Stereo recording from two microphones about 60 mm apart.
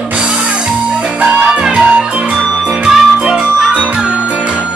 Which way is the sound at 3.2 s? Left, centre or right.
Centre.